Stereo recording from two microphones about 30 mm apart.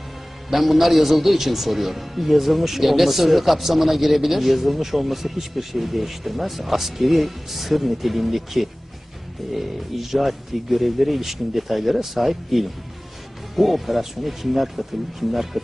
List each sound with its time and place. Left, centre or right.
0.5 s a man's voice: centre